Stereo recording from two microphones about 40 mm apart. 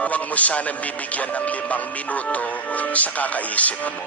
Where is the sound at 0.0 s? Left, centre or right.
Left.